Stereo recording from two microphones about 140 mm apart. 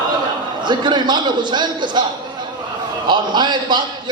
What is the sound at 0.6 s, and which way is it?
A man's voice, 35° right (ahead or behind).